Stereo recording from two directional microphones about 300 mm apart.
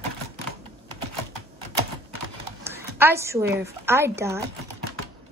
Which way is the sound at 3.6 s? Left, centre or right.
Centre.